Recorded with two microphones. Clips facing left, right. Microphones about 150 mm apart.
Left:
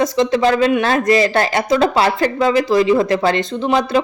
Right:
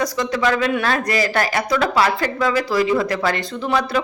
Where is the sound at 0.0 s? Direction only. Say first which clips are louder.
Left 5 dB; 25° left (ahead or behind).